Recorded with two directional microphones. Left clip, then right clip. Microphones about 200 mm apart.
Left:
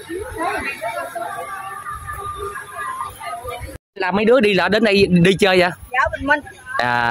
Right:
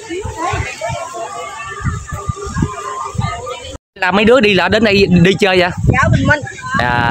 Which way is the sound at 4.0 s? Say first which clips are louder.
Right 5 dB; 10° right (ahead or behind).